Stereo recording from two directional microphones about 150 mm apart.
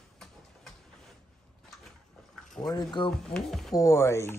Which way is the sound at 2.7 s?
30° left (ahead or behind).